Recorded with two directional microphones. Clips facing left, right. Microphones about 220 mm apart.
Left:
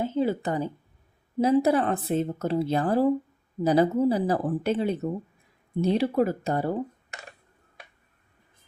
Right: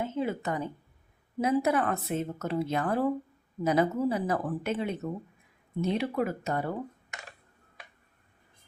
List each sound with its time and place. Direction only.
0.0 s a woman's voice: 30° left (ahead or behind)